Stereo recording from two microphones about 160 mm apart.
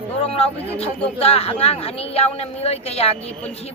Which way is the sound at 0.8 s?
40° left (ahead or behind).